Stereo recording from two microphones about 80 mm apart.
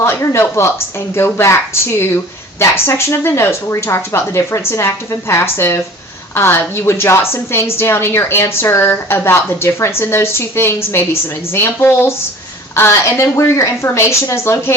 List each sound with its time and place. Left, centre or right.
0.0 s speech: left